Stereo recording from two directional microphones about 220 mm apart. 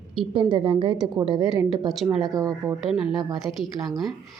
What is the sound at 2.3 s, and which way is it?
Speech, 15° right (ahead or behind).